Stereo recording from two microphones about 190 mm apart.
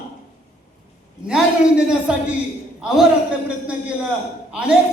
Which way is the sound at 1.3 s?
5° right (ahead or behind).